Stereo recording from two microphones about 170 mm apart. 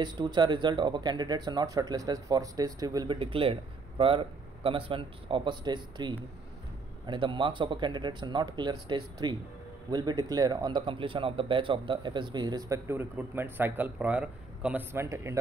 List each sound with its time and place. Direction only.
0.0 s speech: 25° right (ahead or behind)